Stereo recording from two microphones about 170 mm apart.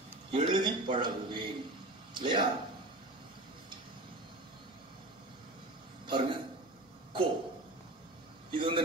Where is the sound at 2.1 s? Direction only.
30° right (ahead or behind).